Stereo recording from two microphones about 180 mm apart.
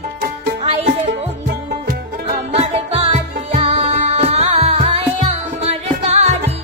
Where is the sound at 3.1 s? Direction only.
35° right (ahead or behind).